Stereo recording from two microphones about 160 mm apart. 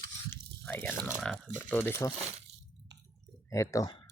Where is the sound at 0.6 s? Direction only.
10° left (ahead or behind).